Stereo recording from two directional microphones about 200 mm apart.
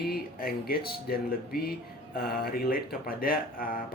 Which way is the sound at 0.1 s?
50° left (ahead or behind).